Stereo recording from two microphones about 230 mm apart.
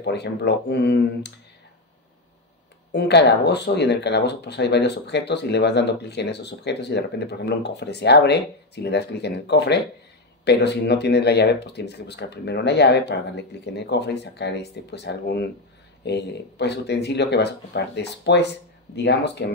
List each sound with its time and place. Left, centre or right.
0.0 s speech: left
2.9 s speech: left